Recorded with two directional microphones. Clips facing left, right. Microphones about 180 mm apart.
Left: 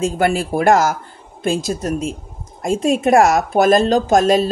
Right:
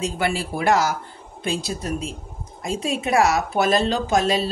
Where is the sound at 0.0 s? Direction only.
50° left (ahead or behind).